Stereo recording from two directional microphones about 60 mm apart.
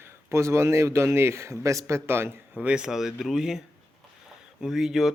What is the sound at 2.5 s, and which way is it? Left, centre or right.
Speech, right.